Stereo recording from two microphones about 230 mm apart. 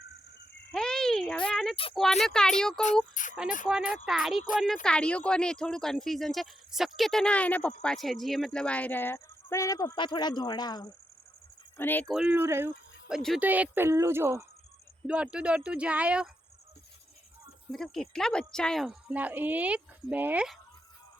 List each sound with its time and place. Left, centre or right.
0.7 s insect: centre
2.0 s speech: centre
3.2 s speech: left
3.7 s speech: centre
17.7 s speech: centre